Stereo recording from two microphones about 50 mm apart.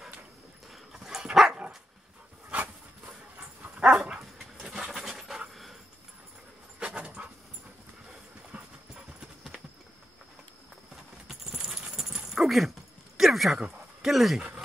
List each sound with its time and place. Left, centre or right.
0.7 s dog: centre
3.6 s dog: right
4.2 s dog: centre
7.2 s dog: centre
11.2 s a sound: centre
12.3 s dog: centre
13.2 s a sound: centre
13.6 s speech: centre